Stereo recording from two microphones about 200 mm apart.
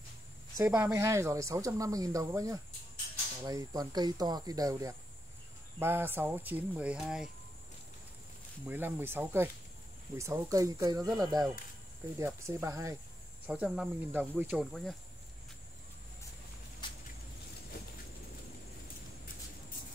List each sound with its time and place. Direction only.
0.6 s speech: 10° right (ahead or behind)
8.6 s speech: 10° right (ahead or behind)
16.8 s a sound: 20° left (ahead or behind)